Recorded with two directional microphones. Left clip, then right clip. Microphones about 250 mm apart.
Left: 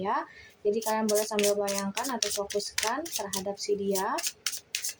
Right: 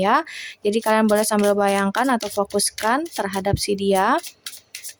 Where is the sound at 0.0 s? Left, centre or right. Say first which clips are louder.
Right 12 dB; right.